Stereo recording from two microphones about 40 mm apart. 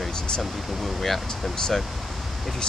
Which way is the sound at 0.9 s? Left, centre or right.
Centre.